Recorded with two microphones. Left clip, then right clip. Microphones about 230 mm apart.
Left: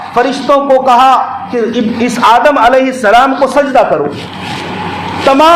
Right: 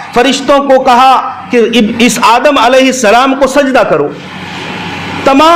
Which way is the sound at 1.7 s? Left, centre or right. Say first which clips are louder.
Right 5 dB; centre.